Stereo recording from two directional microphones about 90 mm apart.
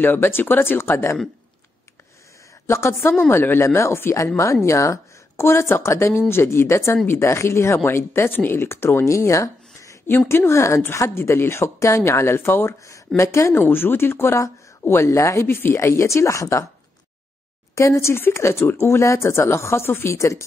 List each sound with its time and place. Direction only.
0.0 s speech: 25° left (ahead or behind)
2.6 s speech: 30° left (ahead or behind)
17.7 s speech: 35° left (ahead or behind)